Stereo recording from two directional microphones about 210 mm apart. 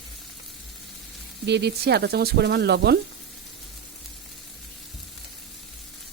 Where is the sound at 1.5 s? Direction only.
50° right (ahead or behind).